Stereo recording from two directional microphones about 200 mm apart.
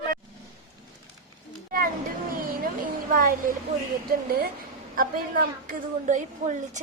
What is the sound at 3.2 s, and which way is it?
A woman's voice, 45° right (ahead or behind).